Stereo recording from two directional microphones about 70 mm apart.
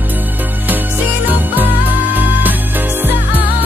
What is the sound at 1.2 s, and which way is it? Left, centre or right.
Music, right.